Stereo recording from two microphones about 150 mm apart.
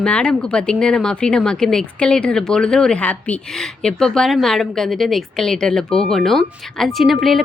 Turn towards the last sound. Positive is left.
turn(degrees=0)  # may be behind; listen again after turning